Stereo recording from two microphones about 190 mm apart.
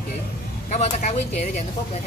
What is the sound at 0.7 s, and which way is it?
Speech, 35° left (ahead or behind).